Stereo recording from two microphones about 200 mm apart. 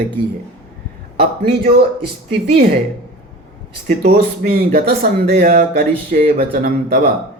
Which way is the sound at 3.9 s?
45° right (ahead or behind).